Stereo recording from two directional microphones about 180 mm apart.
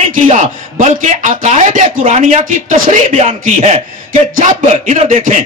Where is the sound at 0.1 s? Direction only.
40° right (ahead or behind).